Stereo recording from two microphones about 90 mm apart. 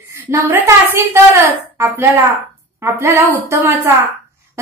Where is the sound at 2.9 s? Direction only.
30° right (ahead or behind).